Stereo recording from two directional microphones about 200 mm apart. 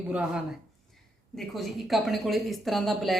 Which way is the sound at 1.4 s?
Centre (ahead or behind).